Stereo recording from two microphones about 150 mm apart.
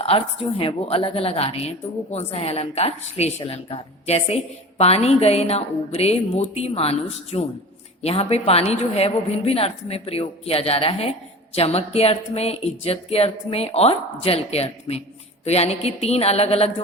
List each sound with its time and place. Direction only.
0.0 s a woman's voice: 40° left (ahead or behind)